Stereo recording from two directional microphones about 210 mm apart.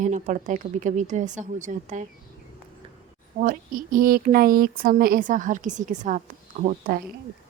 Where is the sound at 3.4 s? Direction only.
40° right (ahead or behind).